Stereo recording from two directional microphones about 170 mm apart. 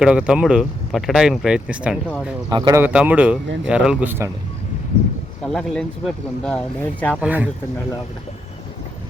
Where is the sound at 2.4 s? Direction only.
25° right (ahead or behind).